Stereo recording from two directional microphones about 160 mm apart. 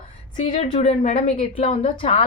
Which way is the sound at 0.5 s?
35° left (ahead or behind).